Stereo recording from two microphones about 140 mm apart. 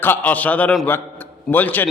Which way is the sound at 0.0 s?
15° left (ahead or behind).